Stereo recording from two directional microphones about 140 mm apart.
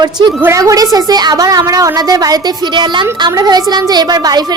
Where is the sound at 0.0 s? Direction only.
30° right (ahead or behind).